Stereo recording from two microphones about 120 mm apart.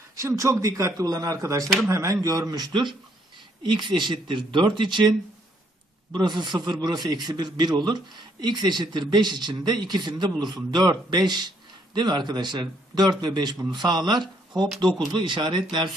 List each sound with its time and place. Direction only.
0.2 s a man's voice: 25° right (ahead or behind)
1.6 s speech: centre (ahead or behind)
1.9 s a man's voice: 25° right (ahead or behind); by 5.1 s 40° right (ahead or behind)
6.1 s a man's voice: 40° right (ahead or behind)